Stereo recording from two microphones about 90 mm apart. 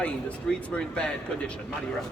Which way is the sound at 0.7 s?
10° left (ahead or behind).